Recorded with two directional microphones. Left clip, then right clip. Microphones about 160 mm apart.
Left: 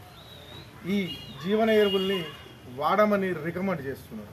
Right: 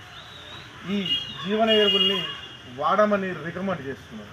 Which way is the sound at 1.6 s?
30° left (ahead or behind).